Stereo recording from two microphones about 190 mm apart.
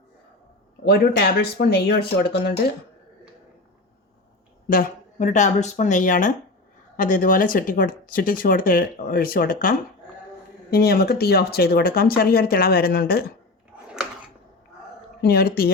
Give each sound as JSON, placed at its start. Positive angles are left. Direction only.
{"t": 0.9, "sound": "speech", "side_deg": 55}
{"t": 4.7, "sound": "speech", "side_deg": 45}
{"t": 15.2, "sound": "speech", "side_deg": 55}